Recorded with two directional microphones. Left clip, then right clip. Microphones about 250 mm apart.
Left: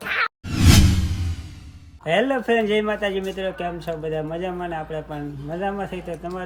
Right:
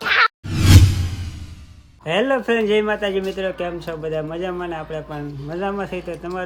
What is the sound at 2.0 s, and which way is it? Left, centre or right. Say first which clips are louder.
A man's voice: right 1 dB; centre.